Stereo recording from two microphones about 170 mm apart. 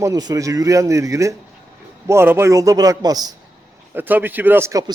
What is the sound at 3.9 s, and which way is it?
A man's voice, 10° right (ahead or behind).